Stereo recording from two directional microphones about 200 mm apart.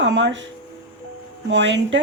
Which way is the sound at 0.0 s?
65° right (ahead or behind).